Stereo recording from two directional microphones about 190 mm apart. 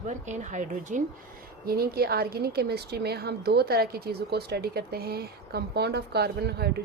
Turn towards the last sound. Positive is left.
turn(degrees=-55)  # may be behind; listen again after turning